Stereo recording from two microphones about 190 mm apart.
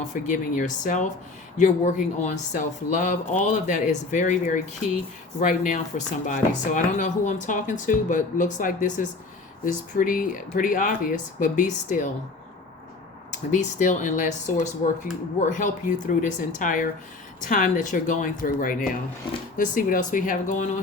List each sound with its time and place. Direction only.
0.0 s speech: 40° left (ahead or behind)
13.3 s speech: 40° left (ahead or behind)